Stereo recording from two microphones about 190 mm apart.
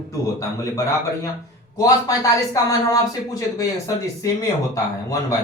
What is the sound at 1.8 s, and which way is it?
Speech, 15° left (ahead or behind).